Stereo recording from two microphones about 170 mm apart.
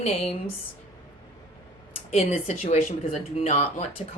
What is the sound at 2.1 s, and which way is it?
Speech, 40° left (ahead or behind).